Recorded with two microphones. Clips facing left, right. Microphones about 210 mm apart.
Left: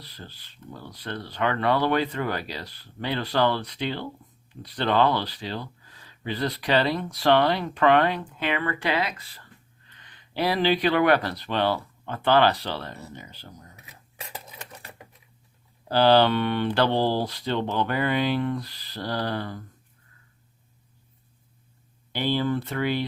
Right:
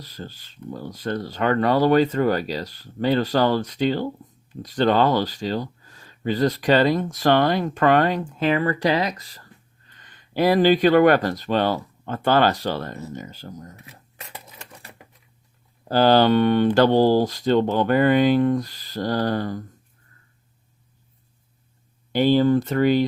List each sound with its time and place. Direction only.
0.0 s speech: 45° right (ahead or behind)
15.9 s speech: 45° right (ahead or behind)
22.1 s speech: 45° right (ahead or behind)